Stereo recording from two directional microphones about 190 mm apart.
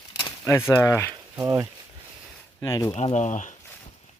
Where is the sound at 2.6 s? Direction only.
15° left (ahead or behind).